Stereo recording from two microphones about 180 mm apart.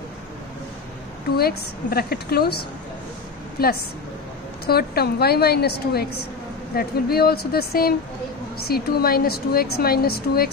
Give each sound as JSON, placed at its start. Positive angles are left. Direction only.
{"t": 1.3, "sound": "a woman's voice", "side_deg": 60}